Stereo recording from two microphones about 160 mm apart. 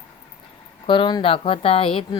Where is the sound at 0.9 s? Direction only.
30° left (ahead or behind).